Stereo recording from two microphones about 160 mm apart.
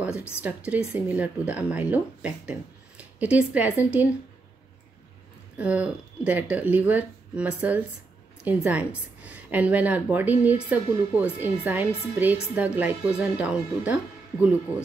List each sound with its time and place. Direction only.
0.1 s a woman's voice: 15° left (ahead or behind)
0.4 s a woman's voice: 10° right (ahead or behind)
5.6 s a woman's voice: 10° right (ahead or behind)